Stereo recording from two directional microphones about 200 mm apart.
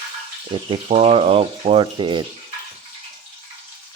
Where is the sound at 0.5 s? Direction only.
25° right (ahead or behind).